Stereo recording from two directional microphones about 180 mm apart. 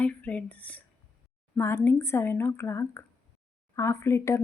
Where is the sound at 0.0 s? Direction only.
10° left (ahead or behind).